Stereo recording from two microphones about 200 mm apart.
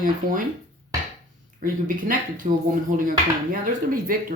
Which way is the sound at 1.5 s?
45° right (ahead or behind).